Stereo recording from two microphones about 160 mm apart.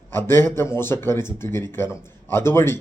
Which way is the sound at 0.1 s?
15° left (ahead or behind).